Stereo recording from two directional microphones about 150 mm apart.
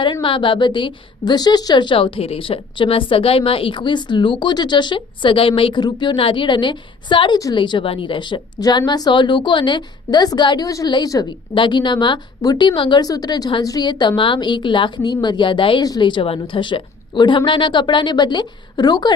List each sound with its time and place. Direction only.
0.0 s a woman's voice: 35° left (ahead or behind)